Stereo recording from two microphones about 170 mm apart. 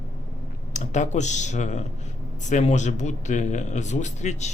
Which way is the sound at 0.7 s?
45° left (ahead or behind).